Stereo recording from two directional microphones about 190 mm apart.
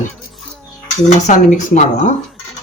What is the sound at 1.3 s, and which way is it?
Speech, 40° left (ahead or behind).